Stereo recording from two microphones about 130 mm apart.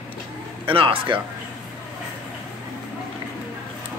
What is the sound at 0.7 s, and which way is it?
Speech, 45° right (ahead or behind).